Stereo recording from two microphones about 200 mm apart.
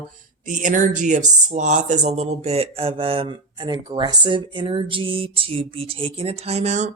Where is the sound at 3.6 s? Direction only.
20° right (ahead or behind).